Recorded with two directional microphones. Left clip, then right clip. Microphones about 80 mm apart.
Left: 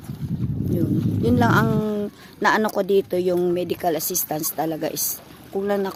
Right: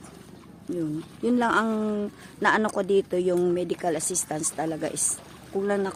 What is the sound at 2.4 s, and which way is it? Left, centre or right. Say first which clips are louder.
Speech: left 4 dB; left.